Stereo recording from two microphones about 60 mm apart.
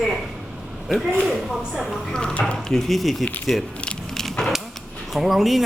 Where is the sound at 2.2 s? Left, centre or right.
Centre.